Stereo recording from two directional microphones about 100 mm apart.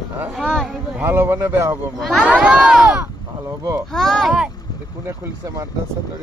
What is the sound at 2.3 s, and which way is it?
Speech, 10° right (ahead or behind).